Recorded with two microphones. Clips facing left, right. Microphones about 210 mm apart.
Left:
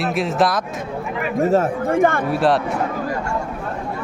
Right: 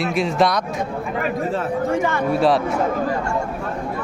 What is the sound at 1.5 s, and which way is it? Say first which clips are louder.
Speech: left 4 dB; 50° left (ahead or behind).